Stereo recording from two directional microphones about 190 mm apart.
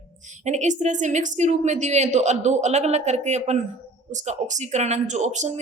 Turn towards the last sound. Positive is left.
turn(degrees=-35)  # may be behind; listen again after turning